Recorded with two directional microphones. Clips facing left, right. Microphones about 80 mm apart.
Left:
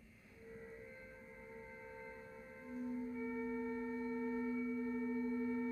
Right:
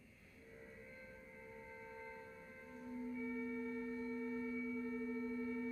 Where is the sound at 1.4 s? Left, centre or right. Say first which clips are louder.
Left 1 dB; centre.